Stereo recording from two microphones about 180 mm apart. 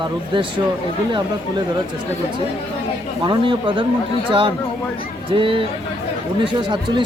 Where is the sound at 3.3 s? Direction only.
30° right (ahead or behind).